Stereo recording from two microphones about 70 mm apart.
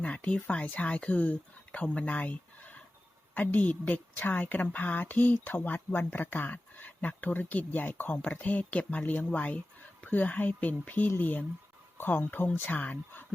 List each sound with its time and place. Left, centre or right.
0.0 s a woman's voice: centre